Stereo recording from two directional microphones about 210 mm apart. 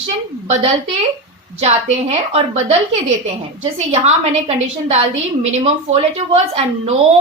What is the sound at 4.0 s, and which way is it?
A woman's voice, 30° right (ahead or behind).